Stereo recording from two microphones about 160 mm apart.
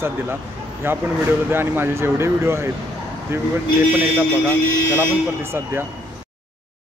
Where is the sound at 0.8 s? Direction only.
15° right (ahead or behind).